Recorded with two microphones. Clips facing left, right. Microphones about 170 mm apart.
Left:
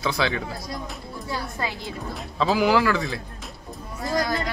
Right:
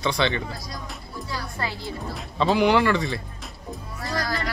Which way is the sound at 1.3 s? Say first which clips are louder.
Left 1 dB; 20° left (ahead or behind).